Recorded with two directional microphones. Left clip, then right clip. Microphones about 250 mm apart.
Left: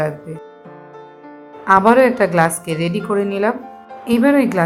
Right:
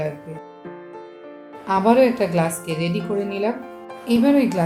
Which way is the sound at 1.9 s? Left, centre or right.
Centre.